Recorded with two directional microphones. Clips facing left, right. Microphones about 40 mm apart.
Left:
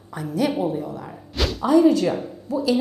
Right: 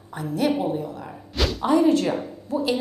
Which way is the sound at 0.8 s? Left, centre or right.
Left.